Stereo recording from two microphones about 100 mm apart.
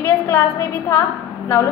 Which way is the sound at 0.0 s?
20° left (ahead or behind).